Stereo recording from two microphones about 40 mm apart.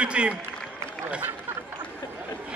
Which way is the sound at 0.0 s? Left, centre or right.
Right.